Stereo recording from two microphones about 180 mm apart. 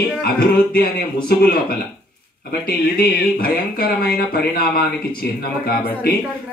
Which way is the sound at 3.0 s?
55° left (ahead or behind).